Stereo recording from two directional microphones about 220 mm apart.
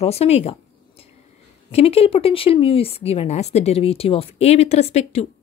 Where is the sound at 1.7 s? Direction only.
25° left (ahead or behind).